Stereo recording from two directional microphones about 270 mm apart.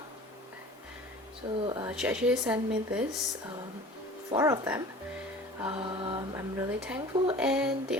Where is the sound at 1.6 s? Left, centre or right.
Centre.